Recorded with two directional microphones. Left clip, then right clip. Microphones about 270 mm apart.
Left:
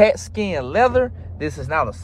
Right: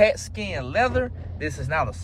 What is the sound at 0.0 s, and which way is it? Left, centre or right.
Speech, left.